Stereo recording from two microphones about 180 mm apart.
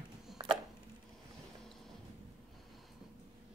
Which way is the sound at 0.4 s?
20° right (ahead or behind).